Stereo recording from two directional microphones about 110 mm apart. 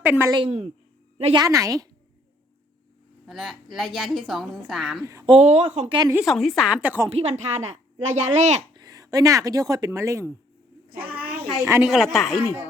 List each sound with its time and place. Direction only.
0.0 s a woman's voice: 15° right (ahead or behind)
0.4 s a woman's voice: 60° right (ahead or behind)
1.5 s a woman's voice: 30° right (ahead or behind)
3.2 s a woman's voice: centre (ahead or behind)
5.2 s speech: 55° right (ahead or behind)
5.5 s speech: 75° right (ahead or behind)
6.2 s a woman's voice: centre (ahead or behind)
7.1 s a woman's voice: 70° right (ahead or behind); by 8.6 s 90° right
8.7 s speech: 35° right (ahead or behind)
11.2 s a woman's voice: 15° right (ahead or behind)